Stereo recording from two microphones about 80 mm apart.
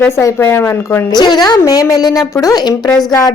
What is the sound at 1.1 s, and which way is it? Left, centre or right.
A woman's voice, left.